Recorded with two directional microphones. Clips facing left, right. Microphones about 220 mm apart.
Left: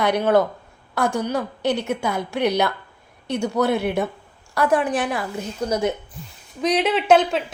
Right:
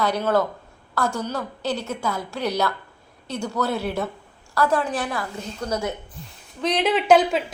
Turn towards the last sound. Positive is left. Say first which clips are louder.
# even
turn(degrees=0)  # may be behind; listen again after turning